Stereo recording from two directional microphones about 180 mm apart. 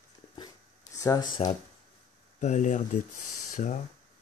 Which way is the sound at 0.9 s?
20° left (ahead or behind).